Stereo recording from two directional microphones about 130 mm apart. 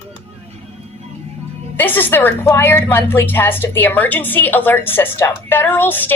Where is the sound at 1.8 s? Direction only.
15° left (ahead or behind).